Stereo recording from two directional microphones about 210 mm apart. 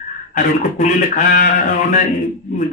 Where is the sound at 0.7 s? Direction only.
40° left (ahead or behind).